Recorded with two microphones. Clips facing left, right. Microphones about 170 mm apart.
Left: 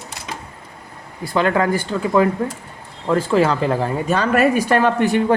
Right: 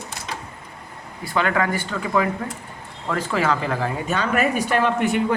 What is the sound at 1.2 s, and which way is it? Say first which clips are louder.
Speech: left 4 dB; 35° left (ahead or behind).